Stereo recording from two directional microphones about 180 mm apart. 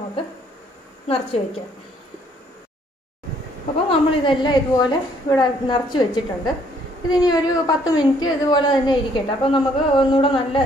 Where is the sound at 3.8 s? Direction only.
30° left (ahead or behind).